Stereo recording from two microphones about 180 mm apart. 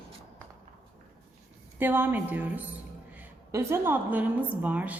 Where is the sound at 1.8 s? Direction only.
10° right (ahead or behind).